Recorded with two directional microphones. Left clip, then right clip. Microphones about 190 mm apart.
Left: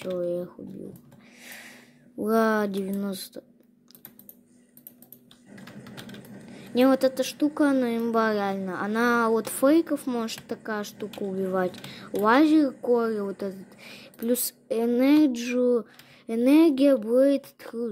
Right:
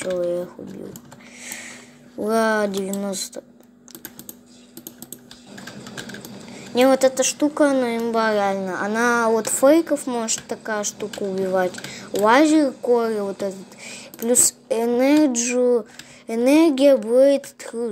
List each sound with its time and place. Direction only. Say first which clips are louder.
0.1 s a woman's voice: right 5 dB; 45° left (ahead or behind)
2.2 s speech: right 4 dB; 55° left (ahead or behind)
2.8 s speech: right 6 dB; 40° left (ahead or behind)
6.7 s a woman's voice: right 6 dB; 45° left (ahead or behind)